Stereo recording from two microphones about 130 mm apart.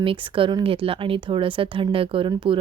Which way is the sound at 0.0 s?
40° right (ahead or behind).